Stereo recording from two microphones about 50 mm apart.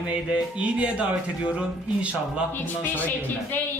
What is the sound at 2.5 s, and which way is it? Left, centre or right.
Speech, left.